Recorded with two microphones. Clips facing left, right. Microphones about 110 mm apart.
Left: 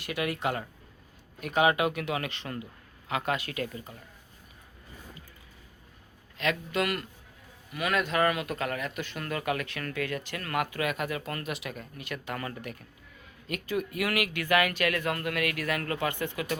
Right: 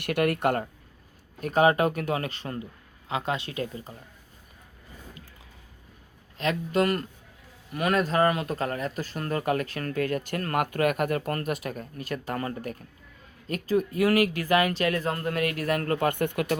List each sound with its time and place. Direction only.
0.0 s speech: 60° right (ahead or behind)
1.4 s speech: 40° right (ahead or behind)
6.3 s speech: 35° right (ahead or behind); by 16.6 s 55° right (ahead or behind)